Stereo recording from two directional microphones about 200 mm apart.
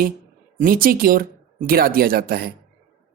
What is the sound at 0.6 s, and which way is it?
Speech, 45° right (ahead or behind).